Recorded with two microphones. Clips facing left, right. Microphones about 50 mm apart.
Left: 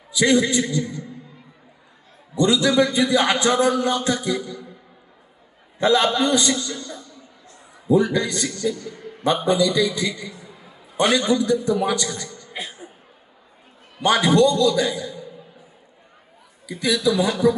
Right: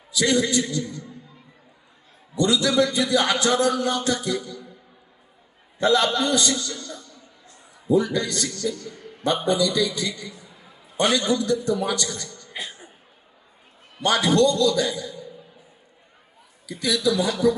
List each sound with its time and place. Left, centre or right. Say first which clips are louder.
0.1 s a man's voice: left 3 dB; left
2.3 s a man's voice: left 3 dB; left
5.8 s a man's voice: left 2 dB; left
14.0 s a man's voice: left 3 dB; left
16.6 s a man's voice: left 2 dB; left